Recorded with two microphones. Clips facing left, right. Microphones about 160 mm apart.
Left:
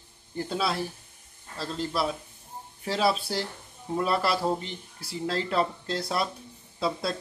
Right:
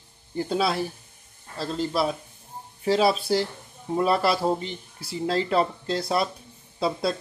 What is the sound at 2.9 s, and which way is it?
Speech, 15° right (ahead or behind).